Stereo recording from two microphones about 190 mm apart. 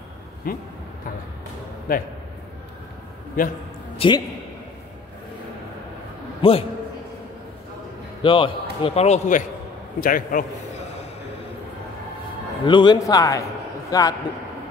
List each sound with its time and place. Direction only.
0.5 s a man's voice: 50° left (ahead or behind)
1.9 s a man's voice: 50° left (ahead or behind)
3.4 s a man's voice: 45° left (ahead or behind)
4.0 s a man's voice: 30° left (ahead or behind)
6.4 s a man's voice: 30° left (ahead or behind)
8.2 s a man's voice: 25° left (ahead or behind)
9.9 s a man's voice: 45° left (ahead or behind)
12.6 s a man's voice: 25° left (ahead or behind)